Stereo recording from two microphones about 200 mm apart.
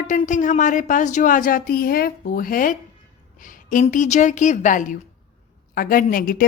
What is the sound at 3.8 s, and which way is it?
A woman's voice, 35° left (ahead or behind).